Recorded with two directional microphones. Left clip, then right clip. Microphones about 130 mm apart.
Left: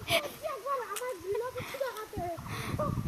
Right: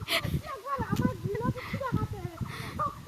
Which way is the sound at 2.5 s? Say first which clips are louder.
Left 1 dB; 10° right (ahead or behind).